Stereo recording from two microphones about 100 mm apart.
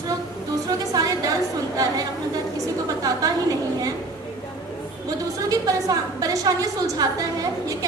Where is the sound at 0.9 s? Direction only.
40° right (ahead or behind).